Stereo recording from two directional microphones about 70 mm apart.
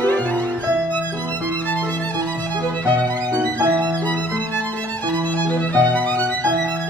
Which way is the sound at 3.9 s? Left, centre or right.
Left.